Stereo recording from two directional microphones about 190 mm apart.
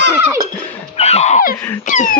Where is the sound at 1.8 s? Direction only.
45° left (ahead or behind).